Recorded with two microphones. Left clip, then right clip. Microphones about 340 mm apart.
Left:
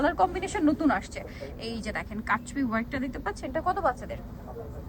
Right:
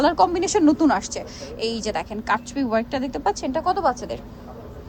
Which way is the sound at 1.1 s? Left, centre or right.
Centre.